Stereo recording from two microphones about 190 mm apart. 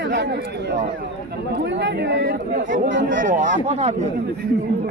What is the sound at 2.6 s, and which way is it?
Speech, 45° right (ahead or behind).